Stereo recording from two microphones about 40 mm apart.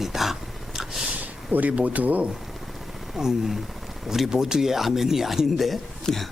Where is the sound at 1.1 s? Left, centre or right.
Right.